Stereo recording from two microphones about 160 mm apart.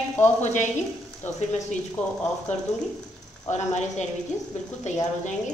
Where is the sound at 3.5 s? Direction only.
45° left (ahead or behind).